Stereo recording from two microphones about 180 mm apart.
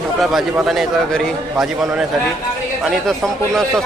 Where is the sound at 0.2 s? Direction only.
Centre (ahead or behind).